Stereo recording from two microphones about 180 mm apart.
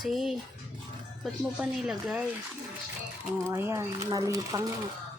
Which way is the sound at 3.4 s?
15° right (ahead or behind).